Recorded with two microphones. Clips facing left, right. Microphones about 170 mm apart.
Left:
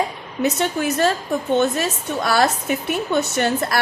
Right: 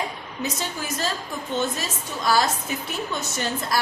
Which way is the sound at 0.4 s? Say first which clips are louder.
Left 10 dB; 65° left (ahead or behind).